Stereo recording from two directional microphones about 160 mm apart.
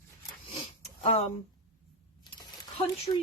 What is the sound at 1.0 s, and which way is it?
Speech, 40° left (ahead or behind).